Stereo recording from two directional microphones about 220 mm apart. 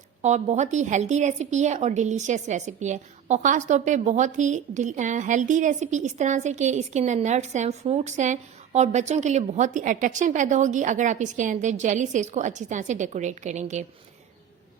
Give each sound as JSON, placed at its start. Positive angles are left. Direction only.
{"t": 0.2, "sound": "a woman's voice", "side_deg": -30}